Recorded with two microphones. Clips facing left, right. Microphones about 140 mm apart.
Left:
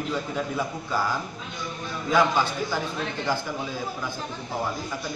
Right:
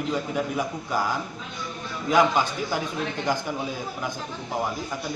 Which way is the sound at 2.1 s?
15° right (ahead or behind).